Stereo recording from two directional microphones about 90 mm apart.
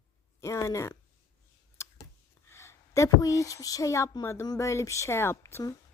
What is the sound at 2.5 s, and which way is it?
Speech, 30° left (ahead or behind).